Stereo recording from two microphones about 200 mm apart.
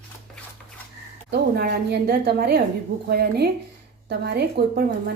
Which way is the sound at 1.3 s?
55° right (ahead or behind).